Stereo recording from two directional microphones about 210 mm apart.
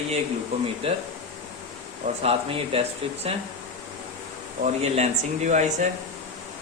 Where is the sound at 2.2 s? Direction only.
25° right (ahead or behind).